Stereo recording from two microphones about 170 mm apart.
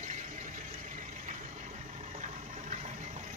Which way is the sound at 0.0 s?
45° right (ahead or behind).